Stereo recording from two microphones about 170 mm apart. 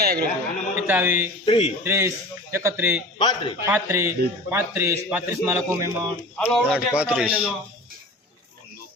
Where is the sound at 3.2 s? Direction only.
25° left (ahead or behind).